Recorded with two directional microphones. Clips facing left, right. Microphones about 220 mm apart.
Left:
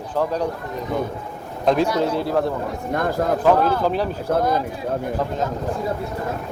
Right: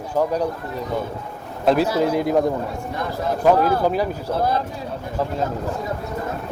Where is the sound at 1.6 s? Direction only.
5° right (ahead or behind).